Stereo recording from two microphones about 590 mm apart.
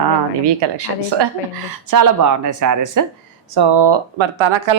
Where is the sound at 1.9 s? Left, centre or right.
Right.